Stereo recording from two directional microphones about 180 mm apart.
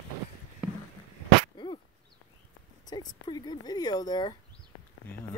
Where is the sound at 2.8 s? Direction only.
25° left (ahead or behind).